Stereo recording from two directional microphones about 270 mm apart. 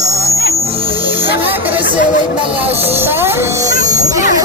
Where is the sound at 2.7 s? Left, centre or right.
Centre.